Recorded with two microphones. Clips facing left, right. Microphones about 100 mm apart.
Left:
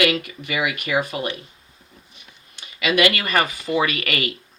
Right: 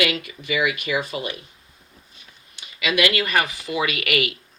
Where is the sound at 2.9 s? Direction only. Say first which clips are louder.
Left 2 dB; 50° left (ahead or behind).